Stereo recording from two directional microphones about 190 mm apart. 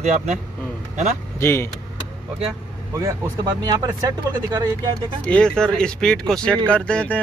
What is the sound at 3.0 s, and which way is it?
Speech, 20° right (ahead or behind).